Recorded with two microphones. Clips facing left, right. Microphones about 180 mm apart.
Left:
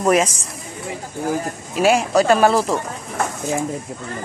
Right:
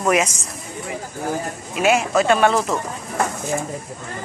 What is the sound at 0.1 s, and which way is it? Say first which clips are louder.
Speech: left 2 dB; 30° left (ahead or behind).